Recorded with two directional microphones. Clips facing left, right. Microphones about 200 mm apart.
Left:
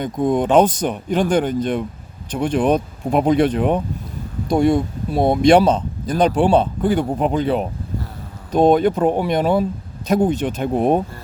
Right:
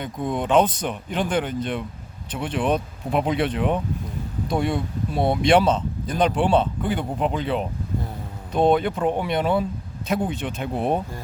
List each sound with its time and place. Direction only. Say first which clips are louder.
0.0 s speech: left 8 dB; 45° left (ahead or behind)